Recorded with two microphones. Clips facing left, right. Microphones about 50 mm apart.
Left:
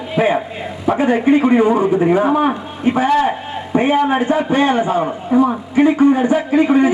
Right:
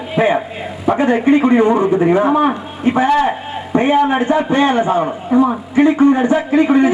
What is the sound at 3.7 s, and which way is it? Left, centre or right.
Speech, centre.